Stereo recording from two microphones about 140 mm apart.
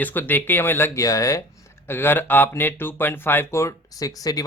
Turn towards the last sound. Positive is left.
turn(degrees=25)  # may be behind; listen again after turning